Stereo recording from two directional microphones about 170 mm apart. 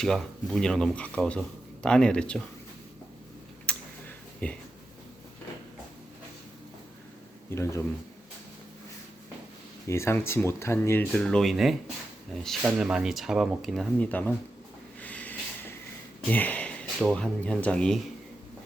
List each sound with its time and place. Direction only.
0.0 s speech: centre (ahead or behind)
3.7 s a sound: 5° left (ahead or behind)
4.4 s speech: 10° left (ahead or behind)
7.5 s speech: 15° left (ahead or behind)
9.8 s speech: 15° left (ahead or behind)
15.0 s snort: 10° left (ahead or behind)
16.3 s speech: 10° left (ahead or behind)